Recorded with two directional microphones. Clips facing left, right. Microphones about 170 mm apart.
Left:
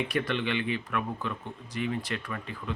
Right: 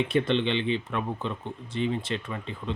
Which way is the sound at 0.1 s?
25° right (ahead or behind).